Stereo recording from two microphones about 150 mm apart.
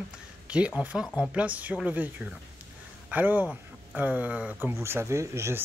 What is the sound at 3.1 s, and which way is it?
Speech, 10° right (ahead or behind).